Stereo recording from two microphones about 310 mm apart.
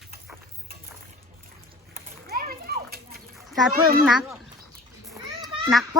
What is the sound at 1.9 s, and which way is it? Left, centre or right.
Children playing, right.